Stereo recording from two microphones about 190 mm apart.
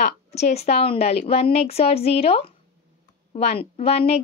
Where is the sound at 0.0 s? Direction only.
35° left (ahead or behind).